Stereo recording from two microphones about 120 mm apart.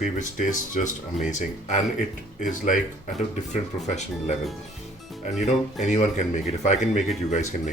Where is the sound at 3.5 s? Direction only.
75° left (ahead or behind).